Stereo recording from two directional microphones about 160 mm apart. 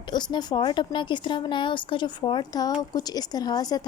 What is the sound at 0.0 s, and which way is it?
A woman's voice, 25° left (ahead or behind).